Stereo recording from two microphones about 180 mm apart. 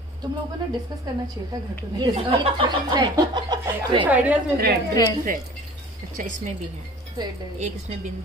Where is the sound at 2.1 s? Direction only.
30° right (ahead or behind).